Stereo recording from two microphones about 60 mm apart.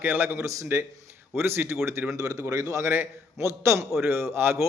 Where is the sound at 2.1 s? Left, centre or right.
Right.